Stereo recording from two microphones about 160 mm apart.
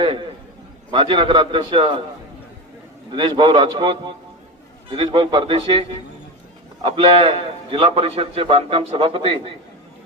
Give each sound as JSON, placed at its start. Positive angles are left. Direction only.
{"t": 0.0, "sound": "a sound", "side_deg": -30}
{"t": 0.9, "sound": "a man's voice", "side_deg": -30}
{"t": 3.1, "sound": "a man's voice", "side_deg": -30}
{"t": 6.8, "sound": "a man's voice", "side_deg": -35}